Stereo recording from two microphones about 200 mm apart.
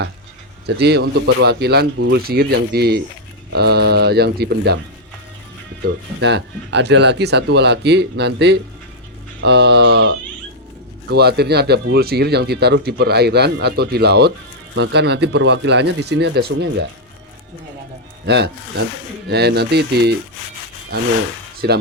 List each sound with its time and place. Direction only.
0.8 s speech: 55° right (ahead or behind)
6.1 s speech: 60° right (ahead or behind)
18.3 s speech: 55° right (ahead or behind)
21.6 s speech: 55° right (ahead or behind)